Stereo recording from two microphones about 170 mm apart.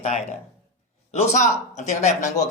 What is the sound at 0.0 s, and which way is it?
Speech, 40° left (ahead or behind).